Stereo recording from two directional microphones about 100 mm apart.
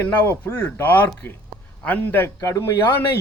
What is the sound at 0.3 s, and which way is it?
Speech, 20° left (ahead or behind).